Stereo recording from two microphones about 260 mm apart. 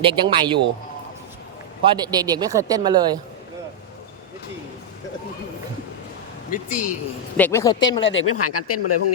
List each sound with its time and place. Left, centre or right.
0.0 s a man's voice: centre
1.8 s speech: centre
6.5 s speech: left
7.3 s speech: centre
8.0 s speech: left